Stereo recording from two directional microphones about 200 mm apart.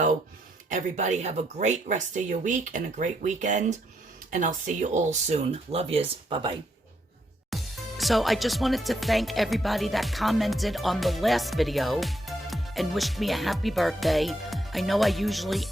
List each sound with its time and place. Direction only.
0.7 s speech: 35° right (ahead or behind)
7.5 s speech: centre (ahead or behind)